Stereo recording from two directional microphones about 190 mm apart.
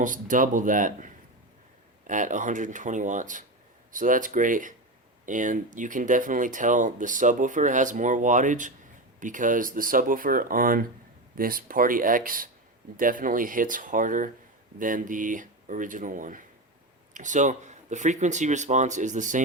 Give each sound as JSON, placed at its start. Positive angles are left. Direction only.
{"t": 0.0, "sound": "speech", "side_deg": -45}